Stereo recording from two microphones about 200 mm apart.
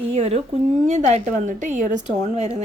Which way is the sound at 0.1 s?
30° right (ahead or behind).